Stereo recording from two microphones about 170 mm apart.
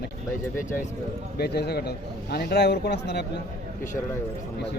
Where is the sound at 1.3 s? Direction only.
70° left (ahead or behind).